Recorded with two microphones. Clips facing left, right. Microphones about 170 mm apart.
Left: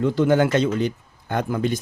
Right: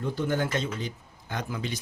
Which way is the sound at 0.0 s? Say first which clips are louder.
Left 10 dB; 85° left.